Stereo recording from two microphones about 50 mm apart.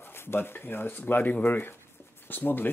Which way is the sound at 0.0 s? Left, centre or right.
Left.